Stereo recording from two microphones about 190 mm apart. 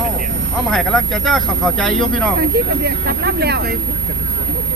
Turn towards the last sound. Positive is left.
turn(degrees=-60)  # may be behind; listen again after turning